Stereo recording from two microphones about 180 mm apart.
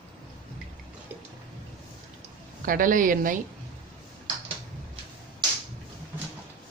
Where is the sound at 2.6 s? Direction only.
50° right (ahead or behind).